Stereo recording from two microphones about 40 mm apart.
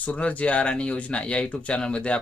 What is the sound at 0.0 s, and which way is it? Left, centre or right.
Speech, left.